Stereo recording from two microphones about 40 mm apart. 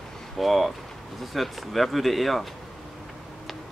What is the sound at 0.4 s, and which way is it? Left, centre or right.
Speech, centre.